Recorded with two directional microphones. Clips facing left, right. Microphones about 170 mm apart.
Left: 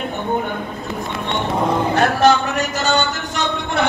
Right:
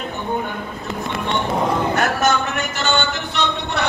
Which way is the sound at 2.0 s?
35° left (ahead or behind).